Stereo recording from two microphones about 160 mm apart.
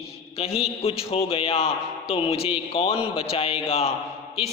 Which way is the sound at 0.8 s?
40° left (ahead or behind).